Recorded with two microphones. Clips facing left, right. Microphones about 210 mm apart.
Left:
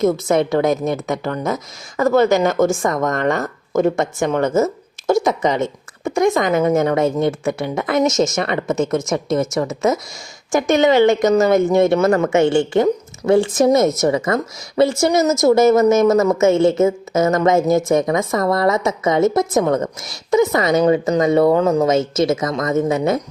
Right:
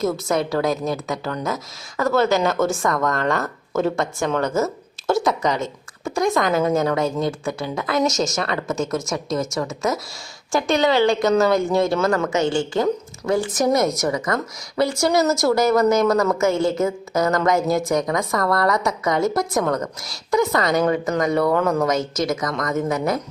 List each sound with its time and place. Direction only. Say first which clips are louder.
0.0 s a woman's voice: left 5 dB; 20° left (ahead or behind)
10.5 s speech: left 4 dB; 20° left (ahead or behind)